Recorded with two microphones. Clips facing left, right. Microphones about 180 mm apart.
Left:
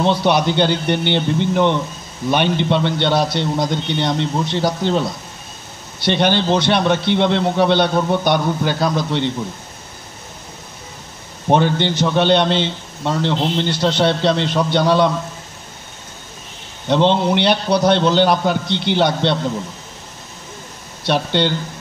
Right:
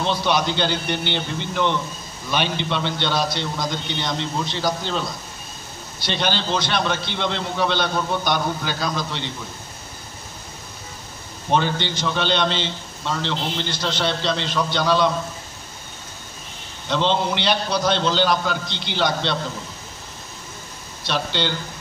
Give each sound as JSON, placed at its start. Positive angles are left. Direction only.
{"t": 0.0, "sound": "a man's voice", "side_deg": 60}
{"t": 6.0, "sound": "a man's voice", "side_deg": 60}
{"t": 11.4, "sound": "a man's voice", "side_deg": 55}
{"t": 16.9, "sound": "a man's voice", "side_deg": 55}
{"t": 21.0, "sound": "a man's voice", "side_deg": 55}